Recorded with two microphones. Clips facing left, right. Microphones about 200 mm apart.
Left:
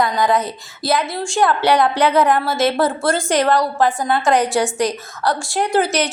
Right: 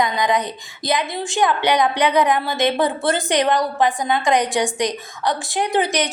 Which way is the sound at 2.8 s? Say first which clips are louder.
Left 2 dB; centre (ahead or behind).